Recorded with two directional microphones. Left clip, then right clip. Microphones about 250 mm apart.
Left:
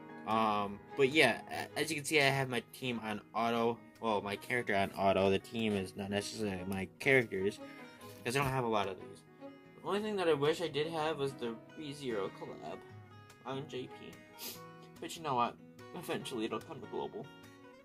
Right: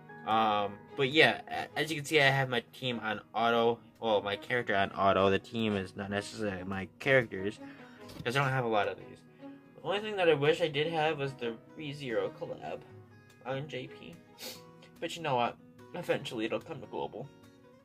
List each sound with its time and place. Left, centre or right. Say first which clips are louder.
0.2 s speech: right 4 dB; left
9.9 s speech: right 4 dB; left
13.5 s speech: right 4 dB; centre
15.0 s speech: right 3 dB; centre